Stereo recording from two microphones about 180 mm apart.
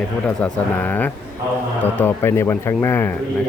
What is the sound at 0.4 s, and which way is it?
Speech, 10° left (ahead or behind).